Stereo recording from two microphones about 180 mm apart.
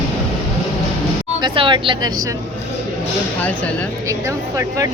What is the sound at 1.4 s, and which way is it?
Vehicle, 25° right (ahead or behind).